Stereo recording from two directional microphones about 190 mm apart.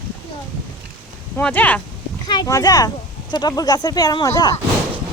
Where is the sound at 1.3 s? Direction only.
10° left (ahead or behind).